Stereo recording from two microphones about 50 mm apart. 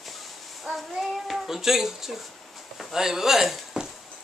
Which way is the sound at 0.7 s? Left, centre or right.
Centre.